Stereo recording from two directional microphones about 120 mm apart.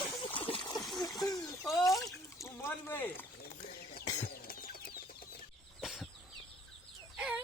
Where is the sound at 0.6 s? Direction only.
30° left (ahead or behind).